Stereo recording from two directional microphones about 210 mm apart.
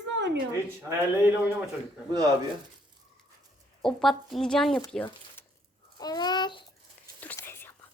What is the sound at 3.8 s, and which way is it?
A woman's voice, centre (ahead or behind).